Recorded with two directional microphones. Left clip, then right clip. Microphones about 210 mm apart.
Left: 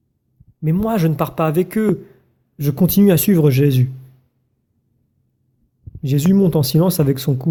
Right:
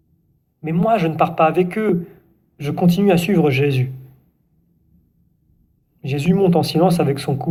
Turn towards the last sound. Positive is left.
turn(degrees=55)  # may be behind; listen again after turning